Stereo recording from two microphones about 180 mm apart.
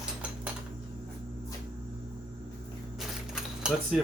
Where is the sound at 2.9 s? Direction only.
5° right (ahead or behind).